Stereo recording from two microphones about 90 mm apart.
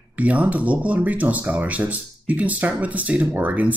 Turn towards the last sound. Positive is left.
turn(degrees=-15)  # may be behind; listen again after turning